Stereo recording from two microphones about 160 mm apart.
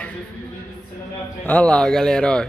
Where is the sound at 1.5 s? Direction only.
5° left (ahead or behind).